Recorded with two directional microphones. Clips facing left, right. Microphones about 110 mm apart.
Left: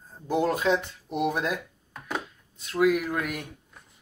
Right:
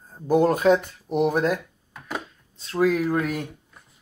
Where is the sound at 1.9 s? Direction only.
5° right (ahead or behind).